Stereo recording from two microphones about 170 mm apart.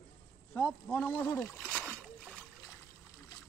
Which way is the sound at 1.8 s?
10° right (ahead or behind).